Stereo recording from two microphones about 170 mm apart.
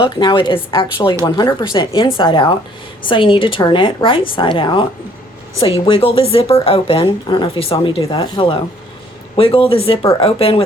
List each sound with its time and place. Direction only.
0.0 s a woman's voice: 30° left (ahead or behind)